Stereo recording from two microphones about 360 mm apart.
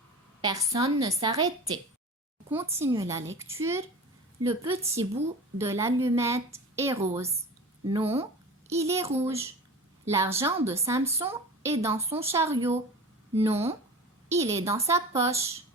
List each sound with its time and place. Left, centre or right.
0.4 s a woman's voice: centre